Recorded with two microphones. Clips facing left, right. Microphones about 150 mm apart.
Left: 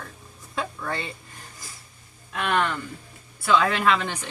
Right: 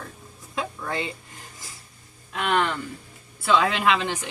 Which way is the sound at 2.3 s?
20° right (ahead or behind).